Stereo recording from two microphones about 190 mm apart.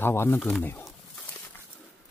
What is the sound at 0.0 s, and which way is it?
Speech, 10° left (ahead or behind).